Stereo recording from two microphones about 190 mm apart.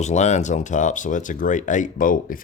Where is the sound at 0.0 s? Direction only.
35° left (ahead or behind).